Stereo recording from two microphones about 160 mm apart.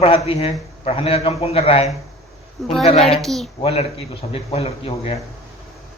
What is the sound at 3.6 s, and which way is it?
Speech, 35° left (ahead or behind).